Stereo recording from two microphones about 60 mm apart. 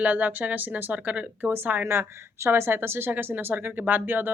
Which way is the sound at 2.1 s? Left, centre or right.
Right.